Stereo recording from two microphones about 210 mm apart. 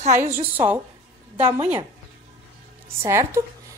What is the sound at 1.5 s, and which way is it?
Speech, 10° right (ahead or behind).